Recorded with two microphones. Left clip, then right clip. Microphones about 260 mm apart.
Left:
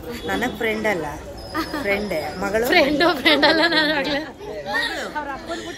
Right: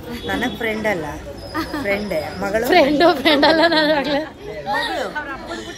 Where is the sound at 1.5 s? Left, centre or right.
Centre.